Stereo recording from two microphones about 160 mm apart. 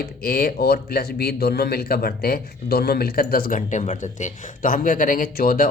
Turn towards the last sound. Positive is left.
turn(degrees=65)  # may be behind; listen again after turning